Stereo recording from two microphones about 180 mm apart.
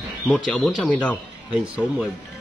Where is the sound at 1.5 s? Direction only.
5° right (ahead or behind).